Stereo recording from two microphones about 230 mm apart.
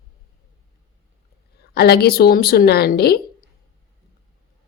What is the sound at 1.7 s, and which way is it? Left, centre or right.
A woman's voice, left.